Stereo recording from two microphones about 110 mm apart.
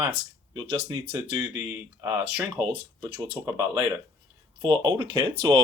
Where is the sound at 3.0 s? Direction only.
50° right (ahead or behind).